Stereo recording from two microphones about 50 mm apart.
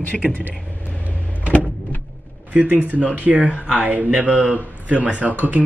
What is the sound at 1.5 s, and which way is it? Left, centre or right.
Power windows, left.